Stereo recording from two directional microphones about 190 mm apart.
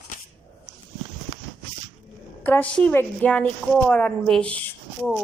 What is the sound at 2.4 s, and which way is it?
A woman's voice, 10° left (ahead or behind).